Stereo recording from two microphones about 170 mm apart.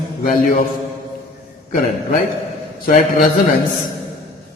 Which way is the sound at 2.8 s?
55° left (ahead or behind).